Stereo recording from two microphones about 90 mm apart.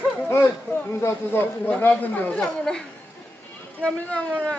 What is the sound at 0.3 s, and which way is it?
Chatter, 25° left (ahead or behind).